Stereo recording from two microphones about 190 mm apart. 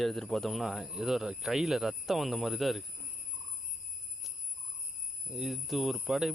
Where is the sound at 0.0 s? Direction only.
Centre (ahead or behind).